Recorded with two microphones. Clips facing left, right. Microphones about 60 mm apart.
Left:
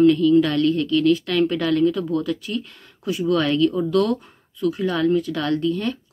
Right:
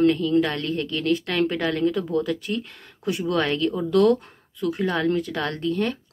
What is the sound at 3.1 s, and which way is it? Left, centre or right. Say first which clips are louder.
Speech: left 4 dB; right.